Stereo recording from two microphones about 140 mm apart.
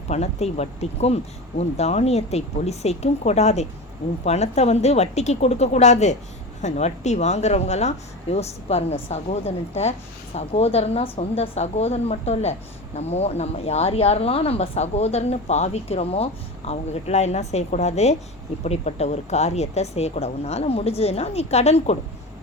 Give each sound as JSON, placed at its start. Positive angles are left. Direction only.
{"t": 0.1, "sound": "speech", "side_deg": 50}